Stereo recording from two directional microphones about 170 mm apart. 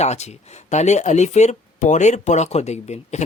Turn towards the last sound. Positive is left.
turn(degrees=40)  # may be behind; listen again after turning